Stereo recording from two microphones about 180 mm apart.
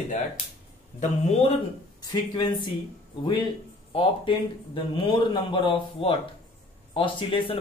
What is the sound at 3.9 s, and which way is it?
A man's voice, 30° left (ahead or behind).